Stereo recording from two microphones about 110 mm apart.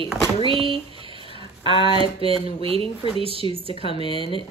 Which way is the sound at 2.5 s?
60° right (ahead or behind).